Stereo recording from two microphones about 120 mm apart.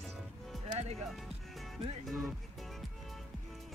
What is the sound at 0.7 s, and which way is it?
Music, 65° right (ahead or behind).